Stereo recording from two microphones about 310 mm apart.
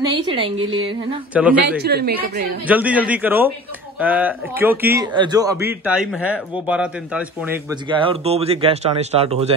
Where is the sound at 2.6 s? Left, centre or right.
Centre.